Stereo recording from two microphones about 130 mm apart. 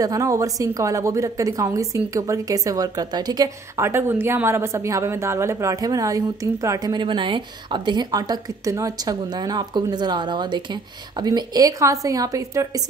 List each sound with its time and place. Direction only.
0.0 s a woman's voice: 25° right (ahead or behind)